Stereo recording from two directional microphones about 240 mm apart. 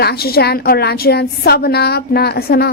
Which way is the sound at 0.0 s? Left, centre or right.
Left.